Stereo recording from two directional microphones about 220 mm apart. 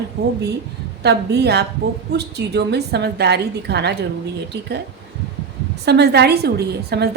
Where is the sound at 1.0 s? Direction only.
50° right (ahead or behind).